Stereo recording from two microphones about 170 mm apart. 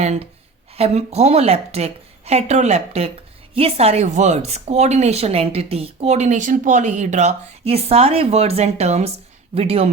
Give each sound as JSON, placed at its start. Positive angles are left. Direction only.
{"t": 0.0, "sound": "speech", "side_deg": -40}